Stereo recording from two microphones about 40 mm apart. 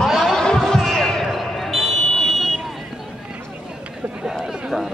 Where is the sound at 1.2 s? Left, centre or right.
Centre.